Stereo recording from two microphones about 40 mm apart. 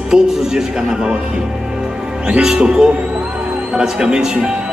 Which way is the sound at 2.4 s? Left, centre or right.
Centre.